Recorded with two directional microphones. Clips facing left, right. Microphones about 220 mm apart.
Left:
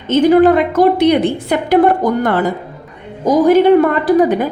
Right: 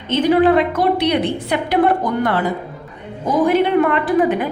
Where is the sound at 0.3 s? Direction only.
45° left (ahead or behind).